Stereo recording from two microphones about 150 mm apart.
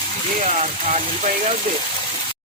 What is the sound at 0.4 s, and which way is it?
Speech, 50° right (ahead or behind).